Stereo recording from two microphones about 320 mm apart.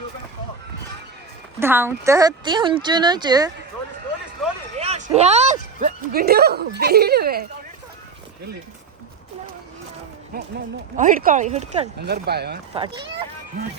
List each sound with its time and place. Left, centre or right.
1.5 s speech: centre
4.8 s speech: right
10.3 s a sound: right
10.9 s speech: right
12.7 s speech: centre